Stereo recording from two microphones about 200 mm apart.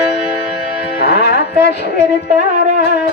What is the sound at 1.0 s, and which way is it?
Music, 55° left (ahead or behind).